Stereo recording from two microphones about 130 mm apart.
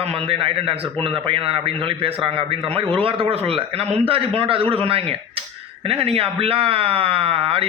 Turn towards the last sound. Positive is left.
turn(degrees=-45)  # may be behind; listen again after turning